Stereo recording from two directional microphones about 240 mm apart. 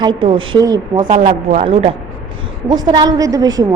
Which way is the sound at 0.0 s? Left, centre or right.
Right.